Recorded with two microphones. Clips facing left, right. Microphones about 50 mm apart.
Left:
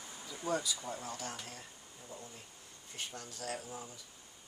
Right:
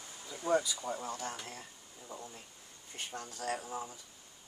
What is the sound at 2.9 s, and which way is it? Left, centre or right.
Speech, right.